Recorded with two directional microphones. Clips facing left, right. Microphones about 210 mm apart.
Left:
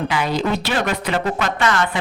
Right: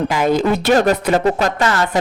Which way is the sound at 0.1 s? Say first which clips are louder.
Right 5 dB; 50° right (ahead or behind).